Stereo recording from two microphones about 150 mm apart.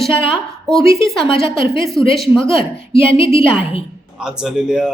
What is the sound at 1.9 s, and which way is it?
Speech, centre (ahead or behind).